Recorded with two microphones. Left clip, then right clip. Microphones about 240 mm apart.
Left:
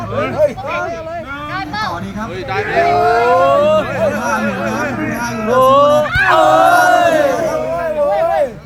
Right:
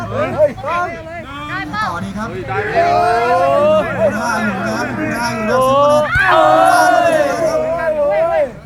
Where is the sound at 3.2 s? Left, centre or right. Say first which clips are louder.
Left 2 dB; left.